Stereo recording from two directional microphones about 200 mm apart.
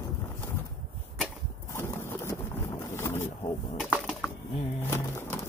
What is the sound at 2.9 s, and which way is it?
Wild animals, 10° left (ahead or behind).